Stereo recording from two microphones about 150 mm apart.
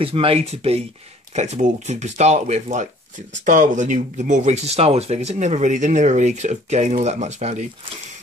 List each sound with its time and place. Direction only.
0.0 s speech: 40° right (ahead or behind)